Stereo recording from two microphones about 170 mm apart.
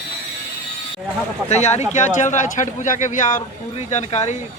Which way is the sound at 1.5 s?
40° left (ahead or behind).